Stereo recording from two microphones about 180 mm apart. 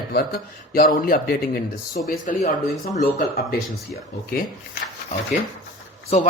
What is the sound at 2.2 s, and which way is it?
Speech, 45° left (ahead or behind).